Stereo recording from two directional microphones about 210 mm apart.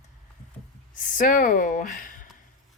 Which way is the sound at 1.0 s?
40° left (ahead or behind).